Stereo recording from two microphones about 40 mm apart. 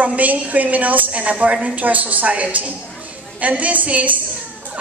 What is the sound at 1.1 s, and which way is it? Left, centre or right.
A woman's voice, right.